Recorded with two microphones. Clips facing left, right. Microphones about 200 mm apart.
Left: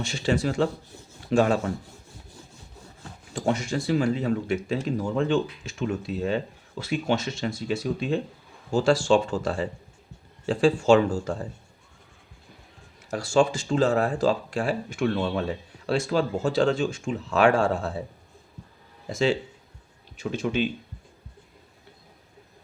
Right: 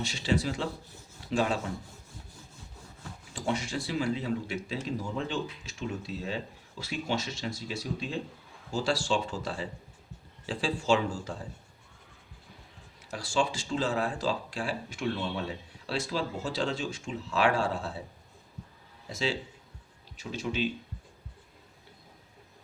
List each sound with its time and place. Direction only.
0.0 s speech: 50° left (ahead or behind)
3.3 s speech: 45° left (ahead or behind)
13.1 s speech: 45° left (ahead or behind)
19.0 s speech: 50° left (ahead or behind)